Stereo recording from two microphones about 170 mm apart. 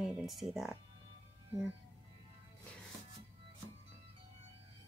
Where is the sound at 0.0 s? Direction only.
Centre (ahead or behind).